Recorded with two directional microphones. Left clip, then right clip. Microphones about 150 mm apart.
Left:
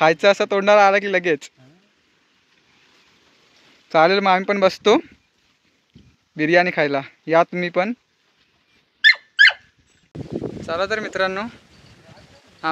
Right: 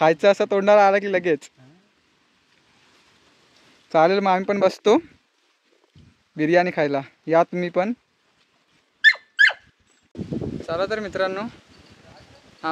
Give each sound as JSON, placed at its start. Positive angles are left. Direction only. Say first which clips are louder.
{"t": 0.0, "sound": "speech", "louder": "left 2 dB", "side_deg": -15}
{"t": 3.9, "sound": "speech", "louder": "left 2 dB", "side_deg": -10}
{"t": 6.3, "sound": "speech", "louder": "left 2 dB", "side_deg": -15}
{"t": 9.0, "sound": "squeak", "louder": "left 3 dB", "side_deg": -80}
{"t": 10.7, "sound": "speech", "louder": "left 2 dB", "side_deg": 0}